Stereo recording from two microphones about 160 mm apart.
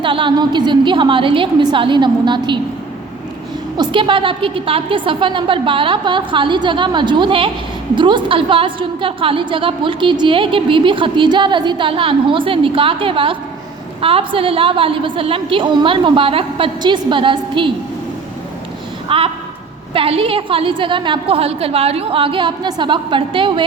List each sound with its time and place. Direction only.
0.0 s a woman's voice: 30° right (ahead or behind)
3.8 s a woman's voice: 30° right (ahead or behind)
19.0 s a sound: 35° right (ahead or behind)
19.9 s a woman's voice: 35° right (ahead or behind)